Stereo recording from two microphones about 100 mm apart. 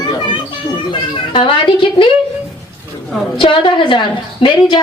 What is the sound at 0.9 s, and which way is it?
A woman's voice, 60° left (ahead or behind).